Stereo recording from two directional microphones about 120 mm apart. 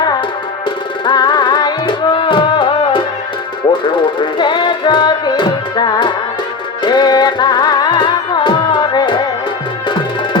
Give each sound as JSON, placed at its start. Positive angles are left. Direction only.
{"t": 1.0, "sound": "music", "side_deg": 35}